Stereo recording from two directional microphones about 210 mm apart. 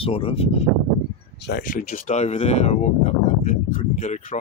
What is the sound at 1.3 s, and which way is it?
Speech, 55° left (ahead or behind).